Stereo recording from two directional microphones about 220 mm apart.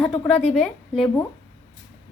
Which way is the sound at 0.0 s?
5° left (ahead or behind).